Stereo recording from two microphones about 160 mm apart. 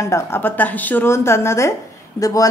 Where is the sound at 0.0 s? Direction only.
15° left (ahead or behind).